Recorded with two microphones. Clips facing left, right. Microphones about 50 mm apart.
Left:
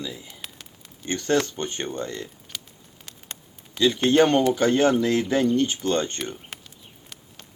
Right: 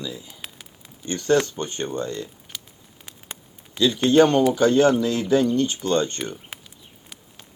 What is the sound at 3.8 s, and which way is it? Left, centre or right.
Speech, left.